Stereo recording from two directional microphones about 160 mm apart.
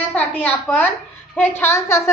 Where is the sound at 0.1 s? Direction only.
10° left (ahead or behind).